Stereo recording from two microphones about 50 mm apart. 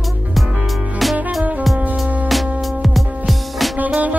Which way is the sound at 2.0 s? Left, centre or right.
Right.